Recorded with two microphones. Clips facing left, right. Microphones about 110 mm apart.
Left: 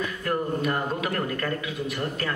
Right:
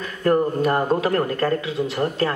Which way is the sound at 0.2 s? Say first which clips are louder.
Right 10 dB; 40° right (ahead or behind).